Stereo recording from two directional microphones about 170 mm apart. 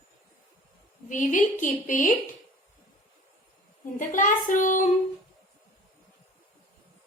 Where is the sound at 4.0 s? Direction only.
50° left (ahead or behind).